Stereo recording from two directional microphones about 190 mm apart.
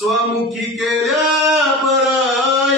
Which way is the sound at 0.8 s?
Centre (ahead or behind).